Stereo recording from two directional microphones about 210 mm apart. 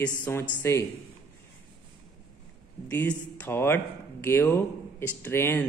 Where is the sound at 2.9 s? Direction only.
10° left (ahead or behind).